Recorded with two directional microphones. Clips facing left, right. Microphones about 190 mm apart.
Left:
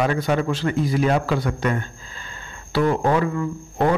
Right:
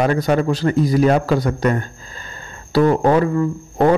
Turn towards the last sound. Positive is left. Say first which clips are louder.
# right 5 dB
turn(degrees=-40)  # may be behind; listen again after turning